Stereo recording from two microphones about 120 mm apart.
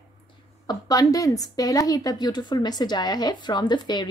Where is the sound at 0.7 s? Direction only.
30° left (ahead or behind).